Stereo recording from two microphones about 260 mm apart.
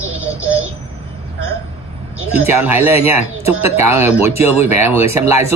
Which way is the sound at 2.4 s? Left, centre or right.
Centre.